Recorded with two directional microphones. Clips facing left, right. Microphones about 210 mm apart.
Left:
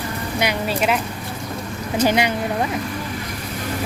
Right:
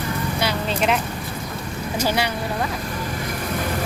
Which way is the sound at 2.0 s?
20° left (ahead or behind).